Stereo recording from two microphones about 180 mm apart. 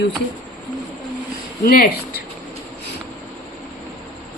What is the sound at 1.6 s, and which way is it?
Speech, 55° left (ahead or behind).